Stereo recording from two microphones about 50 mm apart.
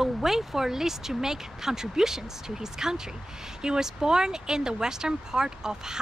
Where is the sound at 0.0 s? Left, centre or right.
Centre.